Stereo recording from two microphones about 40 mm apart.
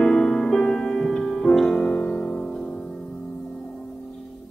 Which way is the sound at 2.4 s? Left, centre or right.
Centre.